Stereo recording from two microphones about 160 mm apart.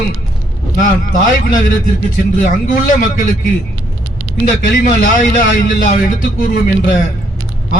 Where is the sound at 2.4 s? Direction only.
60° left (ahead or behind).